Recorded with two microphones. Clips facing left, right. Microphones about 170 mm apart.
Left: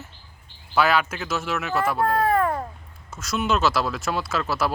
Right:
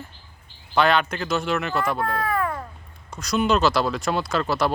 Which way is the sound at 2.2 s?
40° left (ahead or behind).